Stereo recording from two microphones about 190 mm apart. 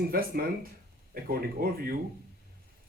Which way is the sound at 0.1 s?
50° right (ahead or behind).